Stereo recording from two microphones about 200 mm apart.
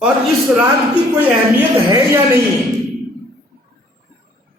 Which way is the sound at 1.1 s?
15° right (ahead or behind).